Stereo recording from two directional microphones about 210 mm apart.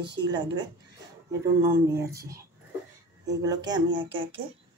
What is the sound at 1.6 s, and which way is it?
Speech, 15° right (ahead or behind).